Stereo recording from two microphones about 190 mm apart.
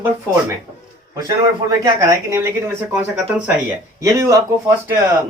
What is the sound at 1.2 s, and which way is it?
Speech, 20° right (ahead or behind).